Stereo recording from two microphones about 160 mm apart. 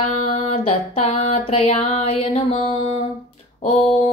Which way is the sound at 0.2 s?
40° left (ahead or behind).